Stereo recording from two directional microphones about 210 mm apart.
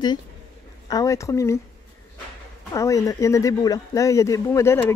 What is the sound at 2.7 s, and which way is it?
Speech, 15° left (ahead or behind).